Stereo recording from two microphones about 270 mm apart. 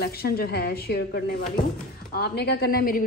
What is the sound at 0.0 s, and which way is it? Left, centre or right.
A woman's voice, left.